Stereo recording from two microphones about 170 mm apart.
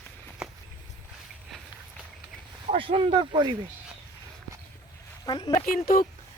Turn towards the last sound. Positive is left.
turn(degrees=55)  # may be behind; listen again after turning